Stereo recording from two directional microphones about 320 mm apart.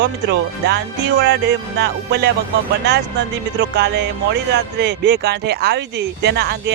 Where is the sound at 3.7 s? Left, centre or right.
Right.